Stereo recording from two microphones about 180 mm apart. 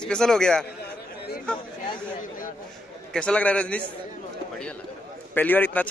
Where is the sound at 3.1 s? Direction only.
5° left (ahead or behind).